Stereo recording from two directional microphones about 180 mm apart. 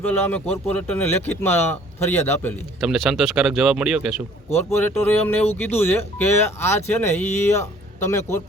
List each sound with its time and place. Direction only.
0.0 s speech: 10° left (ahead or behind)
2.8 s speech: 5° right (ahead or behind)
4.7 s speech: 15° left (ahead or behind)